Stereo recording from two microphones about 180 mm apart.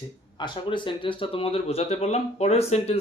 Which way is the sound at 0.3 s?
25° left (ahead or behind).